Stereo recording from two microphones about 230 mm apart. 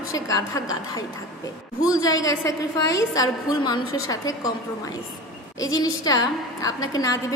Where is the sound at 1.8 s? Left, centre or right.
Centre.